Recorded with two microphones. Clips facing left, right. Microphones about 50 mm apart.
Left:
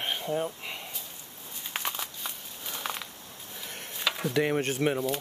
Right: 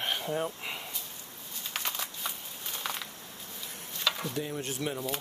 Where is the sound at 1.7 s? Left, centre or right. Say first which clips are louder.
Left 2 dB; left.